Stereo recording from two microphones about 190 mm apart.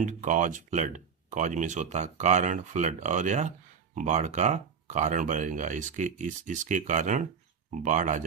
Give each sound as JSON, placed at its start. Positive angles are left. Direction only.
{"t": 0.0, "sound": "speech", "side_deg": -40}